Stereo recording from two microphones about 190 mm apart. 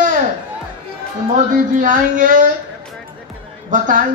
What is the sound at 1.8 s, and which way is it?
Speech, 45° right (ahead or behind).